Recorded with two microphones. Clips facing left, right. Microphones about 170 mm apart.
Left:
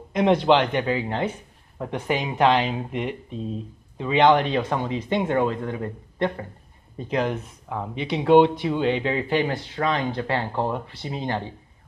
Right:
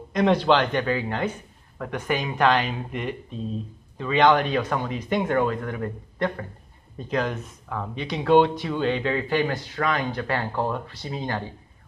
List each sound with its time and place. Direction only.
0.1 s speech: 20° left (ahead or behind)